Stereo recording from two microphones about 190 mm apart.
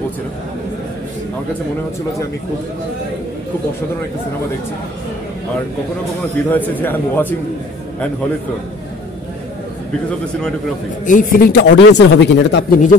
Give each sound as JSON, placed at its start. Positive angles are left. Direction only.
{"t": 6.5, "sound": "a man's voice", "side_deg": 10}
{"t": 11.1, "sound": "speech", "side_deg": 45}